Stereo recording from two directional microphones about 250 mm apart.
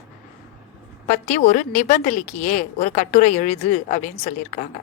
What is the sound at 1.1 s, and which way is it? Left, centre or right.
A woman's voice, left.